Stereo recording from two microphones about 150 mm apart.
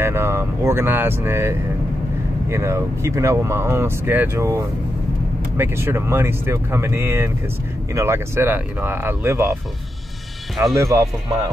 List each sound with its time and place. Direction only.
0.0 s speech: 15° right (ahead or behind)
10.6 s speech: 20° right (ahead or behind)